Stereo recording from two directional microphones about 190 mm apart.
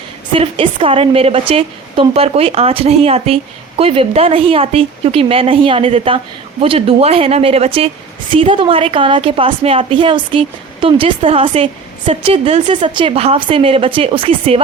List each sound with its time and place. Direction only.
0.3 s a woman's voice: 30° right (ahead or behind)